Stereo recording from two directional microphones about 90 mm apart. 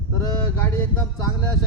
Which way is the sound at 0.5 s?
25° left (ahead or behind).